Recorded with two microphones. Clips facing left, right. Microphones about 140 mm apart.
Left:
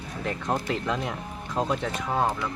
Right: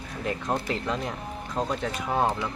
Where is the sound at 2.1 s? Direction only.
10° right (ahead or behind).